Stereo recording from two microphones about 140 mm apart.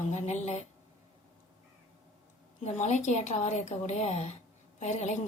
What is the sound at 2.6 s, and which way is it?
A woman's voice, 55° left (ahead or behind).